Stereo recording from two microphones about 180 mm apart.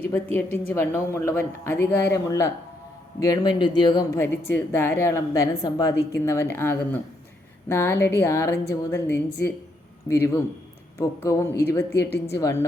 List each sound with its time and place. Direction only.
0.7 s a woman's voice: 15° left (ahead or behind)
4.2 s a woman's voice: 10° left (ahead or behind)